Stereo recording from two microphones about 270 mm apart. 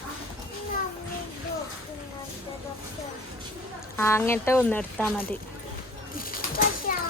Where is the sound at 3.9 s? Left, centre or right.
Centre.